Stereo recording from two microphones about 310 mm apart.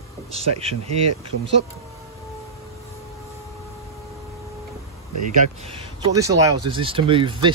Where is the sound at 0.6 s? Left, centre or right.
Centre.